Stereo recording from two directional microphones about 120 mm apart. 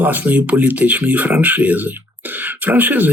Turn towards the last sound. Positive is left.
turn(degrees=-15)  # may be behind; listen again after turning